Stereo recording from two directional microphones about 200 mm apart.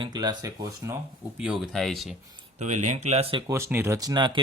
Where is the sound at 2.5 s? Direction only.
35° right (ahead or behind).